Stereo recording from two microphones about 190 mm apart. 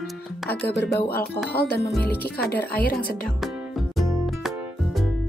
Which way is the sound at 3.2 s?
Centre (ahead or behind).